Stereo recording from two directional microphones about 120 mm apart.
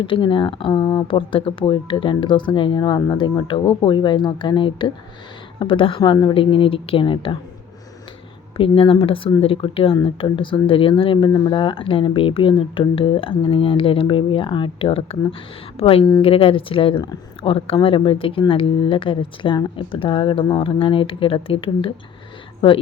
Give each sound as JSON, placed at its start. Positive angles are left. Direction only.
{"t": 0.0, "sound": "speech", "side_deg": 45}
{"t": 6.0, "sound": "speech", "side_deg": 35}
{"t": 8.5, "sound": "speech", "side_deg": 50}